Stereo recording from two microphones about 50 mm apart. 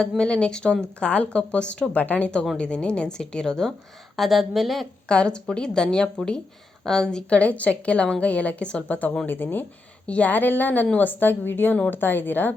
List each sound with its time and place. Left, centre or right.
0.2 s a woman's voice: left
2.0 s a woman's voice: left
2.6 s a woman's voice: centre
4.2 s a woman's voice: centre
5.0 s a woman's voice: centre
7.3 s a woman's voice: left
10.1 s a woman's voice: left